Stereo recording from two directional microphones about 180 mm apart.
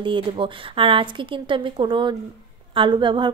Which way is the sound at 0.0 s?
30° right (ahead or behind).